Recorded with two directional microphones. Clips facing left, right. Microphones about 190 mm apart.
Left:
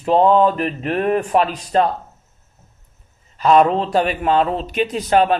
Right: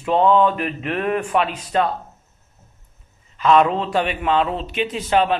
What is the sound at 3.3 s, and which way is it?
A man's voice, 40° left (ahead or behind).